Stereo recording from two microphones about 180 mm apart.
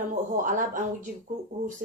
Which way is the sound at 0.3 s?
45° right (ahead or behind).